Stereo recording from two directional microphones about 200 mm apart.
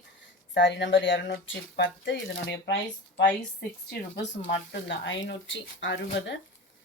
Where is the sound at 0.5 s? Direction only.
60° left (ahead or behind).